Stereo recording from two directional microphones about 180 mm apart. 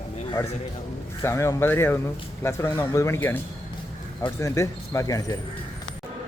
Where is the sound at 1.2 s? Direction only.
15° left (ahead or behind).